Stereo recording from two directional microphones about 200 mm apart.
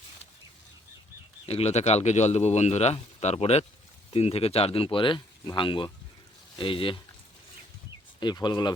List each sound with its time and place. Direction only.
1.5 s speech: 30° left (ahead or behind)
8.2 s speech: 20° left (ahead or behind)